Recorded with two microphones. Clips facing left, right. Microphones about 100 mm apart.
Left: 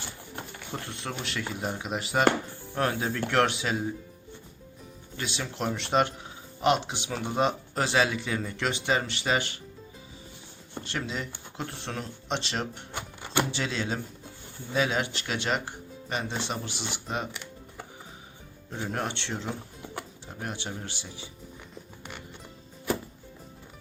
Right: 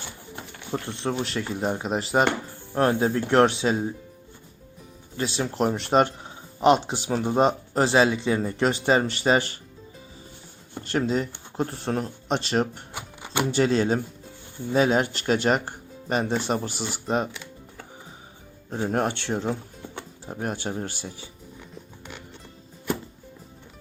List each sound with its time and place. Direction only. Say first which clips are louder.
0.7 s speech: right 9 dB; 30° right (ahead or behind)
5.1 s speech: right 8 dB; 35° right (ahead or behind)
10.8 s speech: right 10 dB; 40° right (ahead or behind)
12.9 s music: even; 15° right (ahead or behind)
13.5 s speech: right 10 dB; 45° right (ahead or behind)
18.7 s speech: right 7 dB; 40° right (ahead or behind)